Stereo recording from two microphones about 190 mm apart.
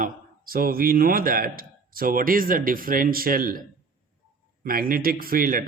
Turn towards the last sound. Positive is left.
turn(degrees=-50)  # may be behind; listen again after turning